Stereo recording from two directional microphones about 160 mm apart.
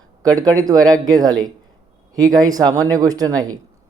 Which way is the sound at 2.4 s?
25° right (ahead or behind).